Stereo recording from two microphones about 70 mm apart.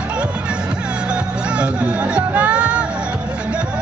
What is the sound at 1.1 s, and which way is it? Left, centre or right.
Music, centre.